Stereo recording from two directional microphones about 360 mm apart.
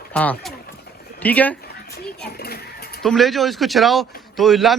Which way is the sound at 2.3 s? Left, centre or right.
Left.